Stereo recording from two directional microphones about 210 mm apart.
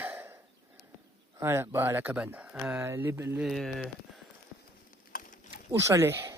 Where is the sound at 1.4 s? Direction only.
10° right (ahead or behind).